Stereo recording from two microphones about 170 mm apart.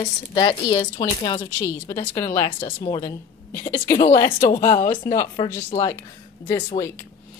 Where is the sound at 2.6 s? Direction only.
25° left (ahead or behind).